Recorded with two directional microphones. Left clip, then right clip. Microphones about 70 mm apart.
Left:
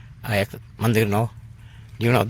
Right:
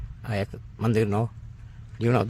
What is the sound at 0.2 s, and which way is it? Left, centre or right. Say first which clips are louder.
Speech: left 7 dB; left.